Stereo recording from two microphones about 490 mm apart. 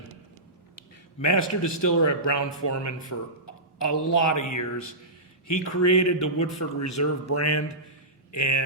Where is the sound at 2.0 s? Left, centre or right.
Left.